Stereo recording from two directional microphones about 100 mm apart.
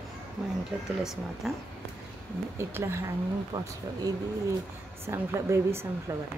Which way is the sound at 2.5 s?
25° right (ahead or behind).